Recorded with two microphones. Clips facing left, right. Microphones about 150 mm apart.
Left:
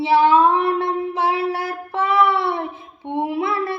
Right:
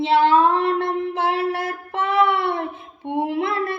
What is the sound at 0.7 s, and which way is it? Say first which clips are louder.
Child singing: left 1 dB; 55° right (ahead or behind).